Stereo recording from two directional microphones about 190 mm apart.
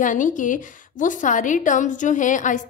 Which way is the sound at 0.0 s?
40° left (ahead or behind).